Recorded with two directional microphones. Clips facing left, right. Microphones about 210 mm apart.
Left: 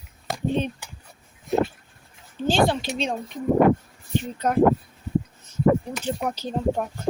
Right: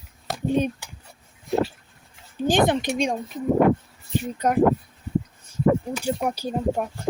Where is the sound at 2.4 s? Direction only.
20° right (ahead or behind).